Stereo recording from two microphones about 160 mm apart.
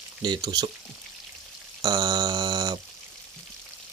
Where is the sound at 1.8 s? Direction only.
25° right (ahead or behind).